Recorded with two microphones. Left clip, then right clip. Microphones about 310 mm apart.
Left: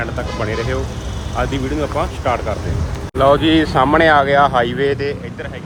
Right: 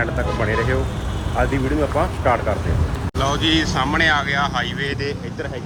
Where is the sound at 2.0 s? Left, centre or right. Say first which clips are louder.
Even; centre.